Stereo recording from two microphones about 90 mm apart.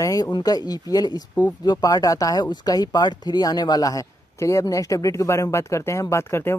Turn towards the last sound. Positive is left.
turn(degrees=30)  # may be behind; listen again after turning